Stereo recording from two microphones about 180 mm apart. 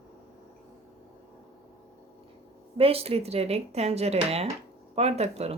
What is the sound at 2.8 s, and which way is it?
Speech, 30° right (ahead or behind).